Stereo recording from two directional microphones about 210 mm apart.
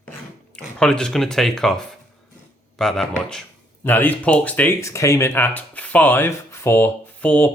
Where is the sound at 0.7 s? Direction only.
5° left (ahead or behind).